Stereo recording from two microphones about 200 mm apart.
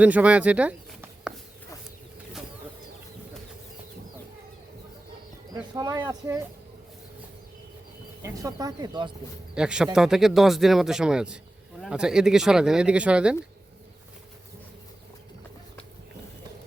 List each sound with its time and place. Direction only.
0.0 s speech: 5° right (ahead or behind)
5.7 s speech: 20° right (ahead or behind)
8.2 s speech: 15° right (ahead or behind)
9.6 s a man's voice: 5° right (ahead or behind)